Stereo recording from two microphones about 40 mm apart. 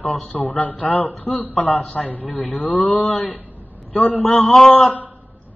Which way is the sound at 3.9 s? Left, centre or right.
Left.